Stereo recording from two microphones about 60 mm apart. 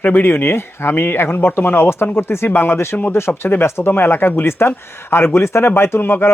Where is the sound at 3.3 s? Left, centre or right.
Left.